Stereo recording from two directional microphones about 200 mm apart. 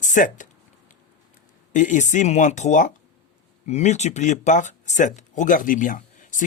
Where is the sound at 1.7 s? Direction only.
40° left (ahead or behind).